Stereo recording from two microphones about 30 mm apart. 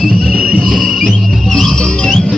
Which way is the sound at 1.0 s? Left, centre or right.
Centre.